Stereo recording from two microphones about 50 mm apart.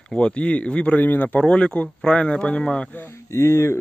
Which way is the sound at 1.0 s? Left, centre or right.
Left.